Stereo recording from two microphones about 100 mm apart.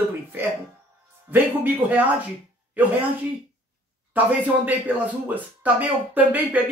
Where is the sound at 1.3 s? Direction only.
15° right (ahead or behind).